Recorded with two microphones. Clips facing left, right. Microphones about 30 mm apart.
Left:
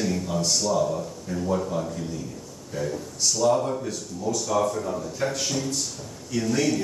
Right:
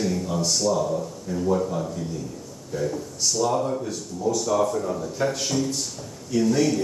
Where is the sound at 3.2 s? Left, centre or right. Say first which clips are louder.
Left 1 dB; centre.